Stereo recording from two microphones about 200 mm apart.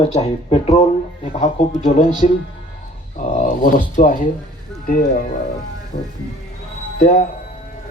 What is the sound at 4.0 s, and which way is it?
Speech, 40° left (ahead or behind).